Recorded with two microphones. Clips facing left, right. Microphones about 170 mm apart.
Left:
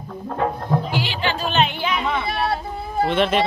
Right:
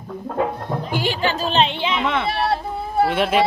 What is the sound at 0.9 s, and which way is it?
Music, 45° right (ahead or behind).